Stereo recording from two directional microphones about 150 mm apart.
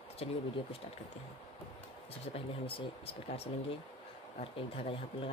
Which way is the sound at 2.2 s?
40° left (ahead or behind).